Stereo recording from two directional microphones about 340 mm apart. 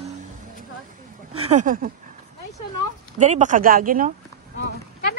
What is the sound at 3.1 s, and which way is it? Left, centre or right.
Speech, right.